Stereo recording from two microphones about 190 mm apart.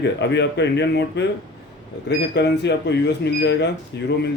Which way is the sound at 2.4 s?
65° left (ahead or behind).